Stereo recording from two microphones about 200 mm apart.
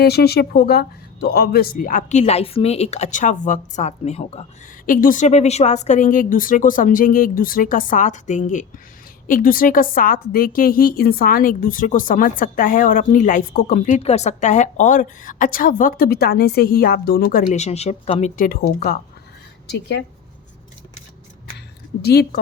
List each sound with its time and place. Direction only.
0.0 s speech: 55° left (ahead or behind); by 4.4 s 30° left (ahead or behind)
4.9 s a woman's voice: 40° left (ahead or behind)
19.7 s speech: 55° left (ahead or behind)
22.0 s a woman's voice: 55° left (ahead or behind)